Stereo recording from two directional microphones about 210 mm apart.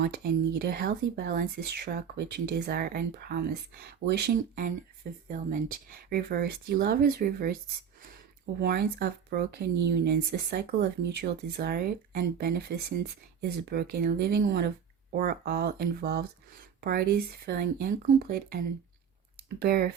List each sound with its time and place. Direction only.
0.6 s speech: 45° right (ahead or behind)
8.6 s speech: 50° right (ahead or behind)